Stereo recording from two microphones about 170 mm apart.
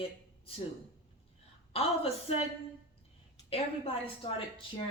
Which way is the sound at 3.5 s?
35° left (ahead or behind).